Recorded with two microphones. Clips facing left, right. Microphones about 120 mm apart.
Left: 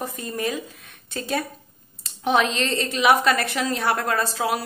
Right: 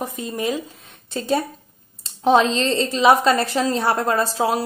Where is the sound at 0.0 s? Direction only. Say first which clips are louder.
Right 3 dB; 20° right (ahead or behind).